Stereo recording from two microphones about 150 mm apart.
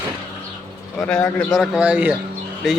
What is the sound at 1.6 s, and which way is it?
Speech, 5° right (ahead or behind).